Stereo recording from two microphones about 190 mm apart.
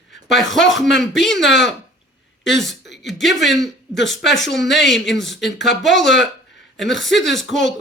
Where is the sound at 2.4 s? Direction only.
Centre (ahead or behind).